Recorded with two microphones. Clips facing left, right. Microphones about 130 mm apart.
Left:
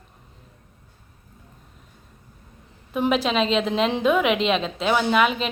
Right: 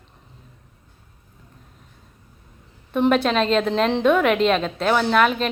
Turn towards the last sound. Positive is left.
turn(degrees=5)  # may be behind; listen again after turning